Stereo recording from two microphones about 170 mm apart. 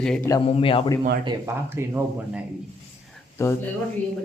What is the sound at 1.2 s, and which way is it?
Speech, 15° right (ahead or behind).